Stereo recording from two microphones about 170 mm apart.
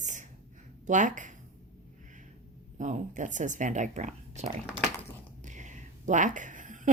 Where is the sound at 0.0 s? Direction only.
45° right (ahead or behind).